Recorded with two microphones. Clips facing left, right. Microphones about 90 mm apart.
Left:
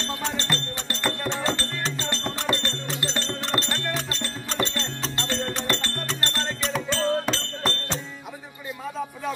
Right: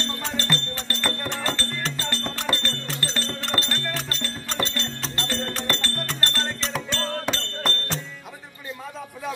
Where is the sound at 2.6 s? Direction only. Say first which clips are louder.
Even; 20° left (ahead or behind).